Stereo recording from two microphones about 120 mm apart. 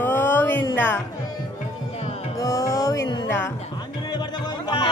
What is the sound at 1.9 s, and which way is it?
Music, 60° left (ahead or behind).